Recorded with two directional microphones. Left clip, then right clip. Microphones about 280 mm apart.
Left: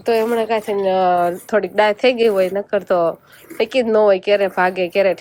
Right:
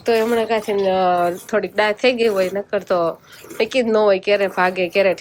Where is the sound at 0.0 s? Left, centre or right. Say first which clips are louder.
Even; centre.